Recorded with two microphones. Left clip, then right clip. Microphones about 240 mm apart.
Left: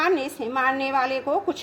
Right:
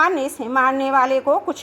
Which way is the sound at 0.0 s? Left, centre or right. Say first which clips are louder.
Right 5 dB; right.